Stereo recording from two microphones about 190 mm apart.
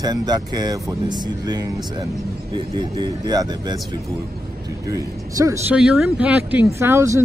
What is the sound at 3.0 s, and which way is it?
Speech, 20° right (ahead or behind).